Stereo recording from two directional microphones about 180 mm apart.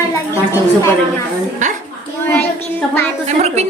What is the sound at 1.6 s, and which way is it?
Speech, 45° right (ahead or behind).